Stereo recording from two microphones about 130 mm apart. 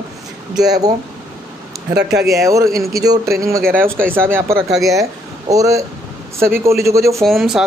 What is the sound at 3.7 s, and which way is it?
Speech, 90° right.